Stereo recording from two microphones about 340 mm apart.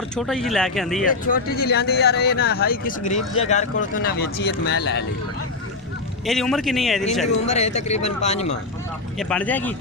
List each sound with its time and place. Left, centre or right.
0.2 s a man's voice: centre
1.0 s speech: left
6.2 s a man's voice: centre
7.4 s speech: centre
9.1 s a man's voice: centre